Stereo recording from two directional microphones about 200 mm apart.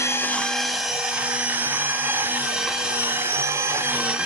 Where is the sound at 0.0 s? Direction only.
10° left (ahead or behind).